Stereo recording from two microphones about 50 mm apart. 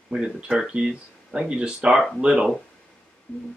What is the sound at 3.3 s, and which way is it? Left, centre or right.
Music, left.